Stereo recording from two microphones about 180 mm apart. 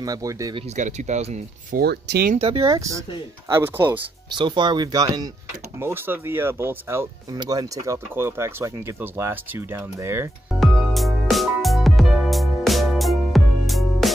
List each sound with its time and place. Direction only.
0.0 s speech: 20° right (ahead or behind)
0.6 s speech: 40° right (ahead or behind)
1.8 s speech: 65° right (ahead or behind)
2.3 s speech: 30° right (ahead or behind); by 4.0 s 10° right (ahead or behind)
4.3 s speech: 25° right (ahead or behind)
10.6 s music: centre (ahead or behind)